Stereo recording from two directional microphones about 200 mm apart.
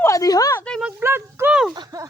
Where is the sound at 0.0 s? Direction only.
15° left (ahead or behind).